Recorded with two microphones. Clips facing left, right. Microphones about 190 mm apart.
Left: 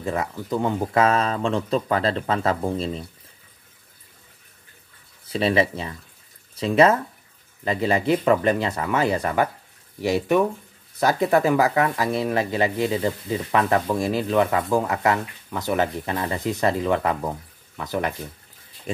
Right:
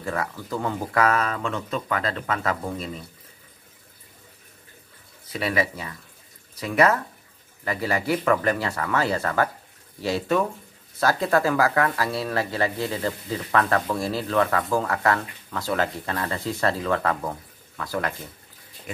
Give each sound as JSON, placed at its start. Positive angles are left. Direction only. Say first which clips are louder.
{"t": 0.0, "sound": "speech", "louder": "left 3 dB", "side_deg": 20}
{"t": 5.3, "sound": "speech", "louder": "left 5 dB", "side_deg": 25}